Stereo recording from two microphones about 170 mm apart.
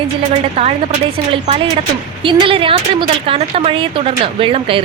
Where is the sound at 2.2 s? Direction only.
30° right (ahead or behind).